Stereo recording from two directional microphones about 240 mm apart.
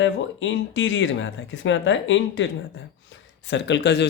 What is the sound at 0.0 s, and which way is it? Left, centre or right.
Speech, left.